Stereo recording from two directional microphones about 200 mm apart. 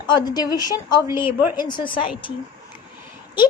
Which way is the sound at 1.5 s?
20° left (ahead or behind).